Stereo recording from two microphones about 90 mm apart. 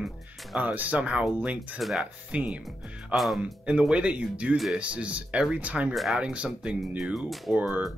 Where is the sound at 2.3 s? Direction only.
15° right (ahead or behind).